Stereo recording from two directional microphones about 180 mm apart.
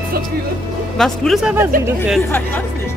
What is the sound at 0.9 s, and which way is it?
Speech, centre (ahead or behind).